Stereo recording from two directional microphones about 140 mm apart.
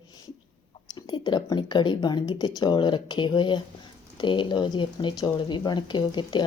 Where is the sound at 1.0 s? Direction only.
30° left (ahead or behind).